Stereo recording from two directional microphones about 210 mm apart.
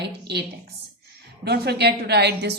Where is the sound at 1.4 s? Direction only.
50° right (ahead or behind).